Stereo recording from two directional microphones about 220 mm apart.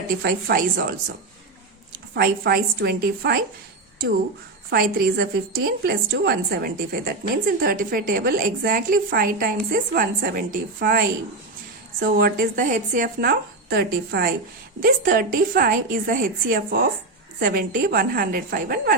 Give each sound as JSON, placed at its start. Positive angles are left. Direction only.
{"t": 0.1, "sound": "a woman's voice", "side_deg": -45}
{"t": 4.7, "sound": "a woman's voice", "side_deg": -50}